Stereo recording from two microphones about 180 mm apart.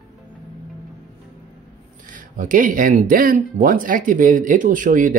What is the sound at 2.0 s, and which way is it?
Speech, 45° right (ahead or behind).